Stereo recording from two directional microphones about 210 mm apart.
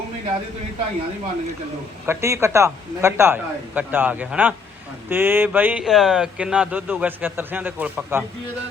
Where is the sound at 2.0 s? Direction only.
15° right (ahead or behind).